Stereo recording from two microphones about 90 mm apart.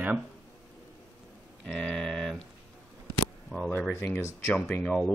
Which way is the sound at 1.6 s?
5° left (ahead or behind).